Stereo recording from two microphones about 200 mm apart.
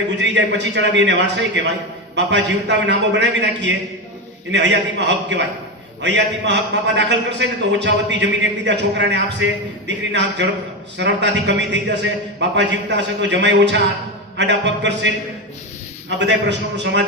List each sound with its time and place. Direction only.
0.2 s a man's voice: 60° right (ahead or behind)